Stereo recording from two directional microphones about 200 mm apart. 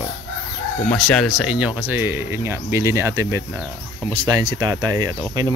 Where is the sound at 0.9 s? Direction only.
5° left (ahead or behind).